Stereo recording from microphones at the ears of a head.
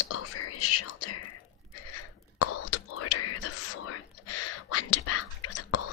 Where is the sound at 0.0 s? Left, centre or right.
Left.